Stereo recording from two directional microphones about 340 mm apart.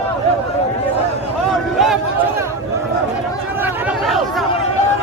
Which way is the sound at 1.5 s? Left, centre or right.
Centre.